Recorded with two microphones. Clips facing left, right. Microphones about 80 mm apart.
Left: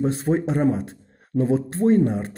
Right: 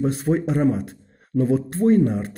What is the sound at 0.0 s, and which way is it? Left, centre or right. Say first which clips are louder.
Speech: even; left.